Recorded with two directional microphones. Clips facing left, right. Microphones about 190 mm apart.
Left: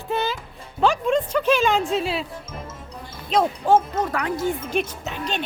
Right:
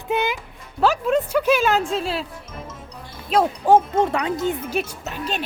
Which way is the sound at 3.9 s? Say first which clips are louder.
Right 4 dB; 25° right (ahead or behind).